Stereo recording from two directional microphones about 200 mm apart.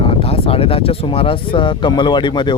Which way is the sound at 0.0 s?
30° left (ahead or behind).